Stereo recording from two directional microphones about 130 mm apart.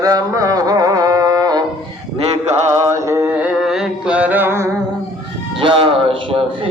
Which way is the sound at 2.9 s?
20° right (ahead or behind).